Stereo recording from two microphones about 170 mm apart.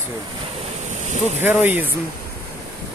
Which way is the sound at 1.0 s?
45° right (ahead or behind).